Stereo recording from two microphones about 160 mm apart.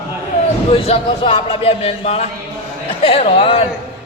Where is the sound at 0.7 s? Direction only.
35° left (ahead or behind).